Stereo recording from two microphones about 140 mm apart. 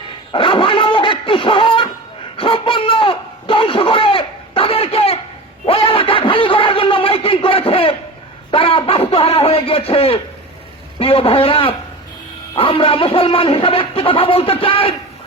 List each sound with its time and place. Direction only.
0.3 s dog: 40° left (ahead or behind)
2.4 s a sound: 40° left (ahead or behind)
11.0 s a man's voice: 40° left (ahead or behind)